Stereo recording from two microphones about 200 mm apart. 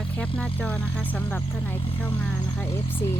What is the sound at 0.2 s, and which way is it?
Speech, 5° left (ahead or behind).